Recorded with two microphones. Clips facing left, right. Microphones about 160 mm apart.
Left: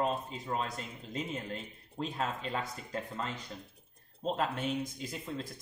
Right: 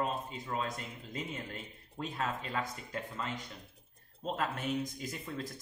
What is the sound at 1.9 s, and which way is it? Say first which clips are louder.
Speech: left 1 dB; 30° left (ahead or behind).